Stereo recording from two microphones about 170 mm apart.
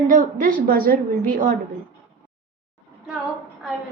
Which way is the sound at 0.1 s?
50° right (ahead or behind).